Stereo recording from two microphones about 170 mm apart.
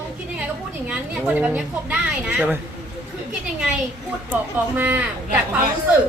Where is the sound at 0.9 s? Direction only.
5° right (ahead or behind).